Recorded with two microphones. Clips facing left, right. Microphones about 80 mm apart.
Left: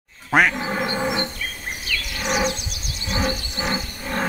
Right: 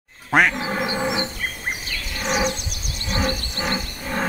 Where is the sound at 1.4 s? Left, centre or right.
Right.